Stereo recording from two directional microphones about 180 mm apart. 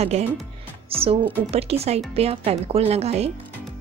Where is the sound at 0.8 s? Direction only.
30° right (ahead or behind).